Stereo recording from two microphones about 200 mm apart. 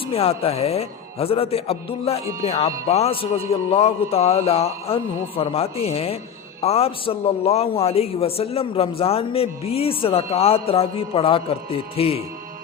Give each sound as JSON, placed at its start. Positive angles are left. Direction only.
{"t": 0.1, "sound": "a man's voice", "side_deg": 30}